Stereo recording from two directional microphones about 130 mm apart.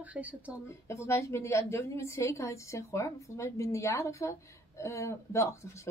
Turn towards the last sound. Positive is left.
turn(degrees=20)  # may be behind; listen again after turning